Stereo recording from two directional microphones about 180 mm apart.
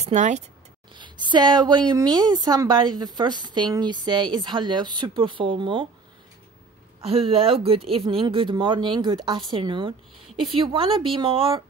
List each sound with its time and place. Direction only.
0.0 s speech: 40° right (ahead or behind)
0.9 s a woman's voice: 25° right (ahead or behind)
7.0 s a woman's voice: 30° right (ahead or behind)